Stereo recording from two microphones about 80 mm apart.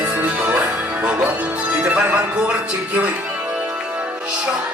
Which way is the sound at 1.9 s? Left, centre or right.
Centre.